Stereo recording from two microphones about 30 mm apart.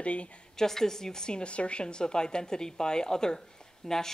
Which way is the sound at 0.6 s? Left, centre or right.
Centre.